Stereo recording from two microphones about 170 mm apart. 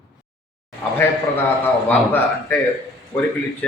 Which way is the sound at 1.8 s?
10° left (ahead or behind).